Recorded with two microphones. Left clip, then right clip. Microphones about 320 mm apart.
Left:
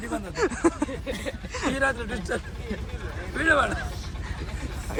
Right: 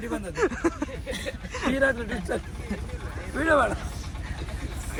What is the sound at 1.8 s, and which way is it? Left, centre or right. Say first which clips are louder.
Speech: right 3 dB; right.